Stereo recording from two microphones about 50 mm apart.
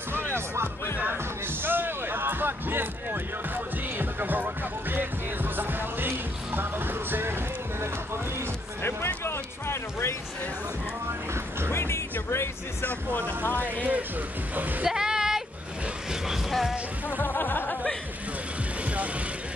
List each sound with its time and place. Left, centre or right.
0.1 s music: right
8.8 s a sound: left
11.7 s music: left
13.5 s speech: left
14.5 s a sound: right
14.9 s music: centre
17.2 s music: left